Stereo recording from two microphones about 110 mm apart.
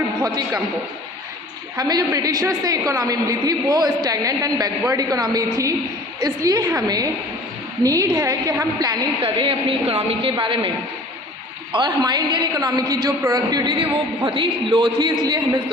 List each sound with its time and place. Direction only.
0.3 s a woman's voice: 35° right (ahead or behind)
1.7 s a woman's voice: 35° right (ahead or behind)
9.2 s a woman's voice: 55° right (ahead or behind)
11.7 s a woman's voice: 40° right (ahead or behind)
14.3 s a man's voice: 50° right (ahead or behind)